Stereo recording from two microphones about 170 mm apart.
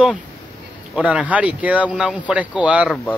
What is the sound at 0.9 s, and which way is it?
Speech, 5° right (ahead or behind).